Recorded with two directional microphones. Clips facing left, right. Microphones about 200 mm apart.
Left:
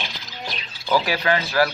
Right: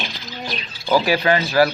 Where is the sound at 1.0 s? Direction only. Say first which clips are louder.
Right 4 dB; 5° right (ahead or behind).